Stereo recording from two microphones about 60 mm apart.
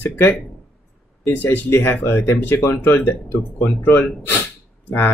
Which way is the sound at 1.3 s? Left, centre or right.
Left.